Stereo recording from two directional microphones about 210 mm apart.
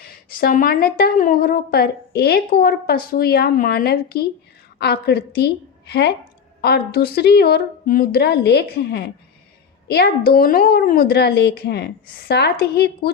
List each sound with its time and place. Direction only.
0.0 s a woman's voice: 45° left (ahead or behind)